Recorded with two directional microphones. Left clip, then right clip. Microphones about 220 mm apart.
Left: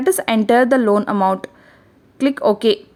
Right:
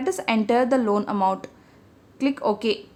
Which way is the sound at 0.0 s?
30° left (ahead or behind).